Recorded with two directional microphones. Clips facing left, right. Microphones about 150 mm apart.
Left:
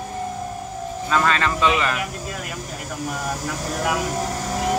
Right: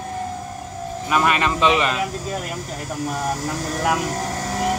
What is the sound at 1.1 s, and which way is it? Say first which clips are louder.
Speech: right 1 dB; 15° right (ahead or behind).